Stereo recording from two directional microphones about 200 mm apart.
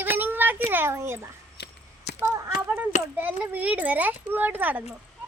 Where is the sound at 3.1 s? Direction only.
10° right (ahead or behind).